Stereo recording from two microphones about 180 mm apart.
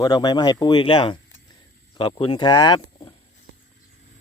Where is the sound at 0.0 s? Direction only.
20° left (ahead or behind).